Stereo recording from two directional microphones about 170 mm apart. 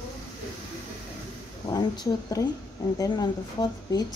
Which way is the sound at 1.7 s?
25° left (ahead or behind).